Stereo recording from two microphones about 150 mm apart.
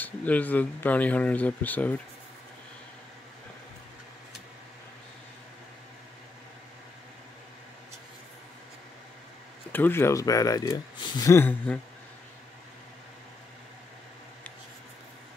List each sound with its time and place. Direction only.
0.0 s speech: 10° left (ahead or behind)
9.7 s speech: 15° left (ahead or behind)